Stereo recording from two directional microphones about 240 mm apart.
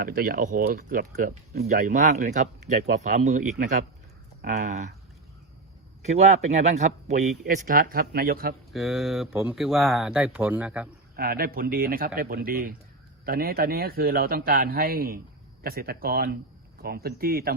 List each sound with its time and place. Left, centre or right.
0.0 s speech: right
6.1 s speech: right
8.7 s speech: centre
11.2 s speech: right